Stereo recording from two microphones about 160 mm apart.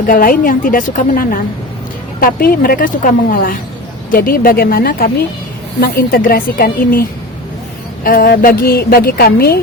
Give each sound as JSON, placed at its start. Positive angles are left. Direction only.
{"t": 0.0, "sound": "a woman's voice", "side_deg": 60}
{"t": 8.0, "sound": "a woman's voice", "side_deg": 65}